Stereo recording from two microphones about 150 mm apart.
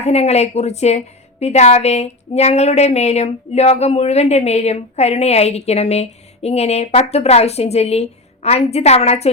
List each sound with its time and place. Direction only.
0.0 s a woman's voice: 45° left (ahead or behind)